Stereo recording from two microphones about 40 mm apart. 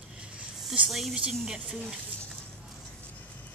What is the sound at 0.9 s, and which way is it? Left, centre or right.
Speech, centre.